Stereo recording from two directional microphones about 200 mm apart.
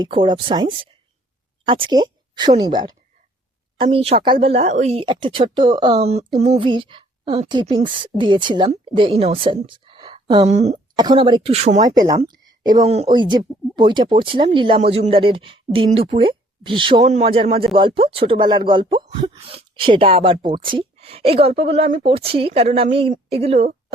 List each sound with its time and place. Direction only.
0.0 s speech: 25° right (ahead or behind)
10.9 s speech: 20° right (ahead or behind)
12.2 s a sound: 20° right (ahead or behind)
12.8 s speech: 30° right (ahead or behind)
13.1 s speech: 20° right (ahead or behind)